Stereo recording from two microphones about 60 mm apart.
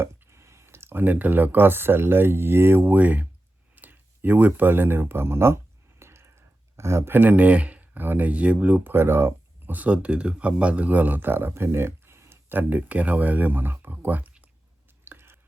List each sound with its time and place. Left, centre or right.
0.0 s clicking: right
1.0 s speech: right
2.9 s speech: right
8.9 s speech: right
9.7 s speech: right
12.5 s speech: right
15.0 s a sound: right